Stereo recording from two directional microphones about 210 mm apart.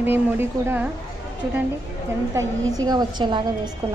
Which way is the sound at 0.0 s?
10° right (ahead or behind).